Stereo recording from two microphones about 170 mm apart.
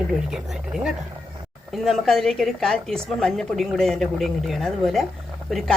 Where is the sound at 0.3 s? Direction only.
5° right (ahead or behind).